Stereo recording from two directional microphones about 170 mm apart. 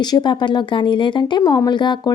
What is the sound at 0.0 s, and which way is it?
Speech, 25° left (ahead or behind).